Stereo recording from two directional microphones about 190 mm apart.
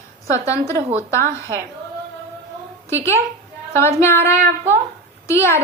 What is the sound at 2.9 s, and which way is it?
A woman's voice, 15° left (ahead or behind).